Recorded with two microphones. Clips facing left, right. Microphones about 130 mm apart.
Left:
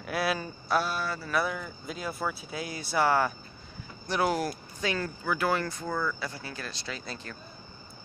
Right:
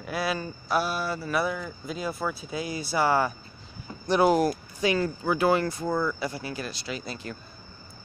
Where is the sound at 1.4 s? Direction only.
Centre (ahead or behind).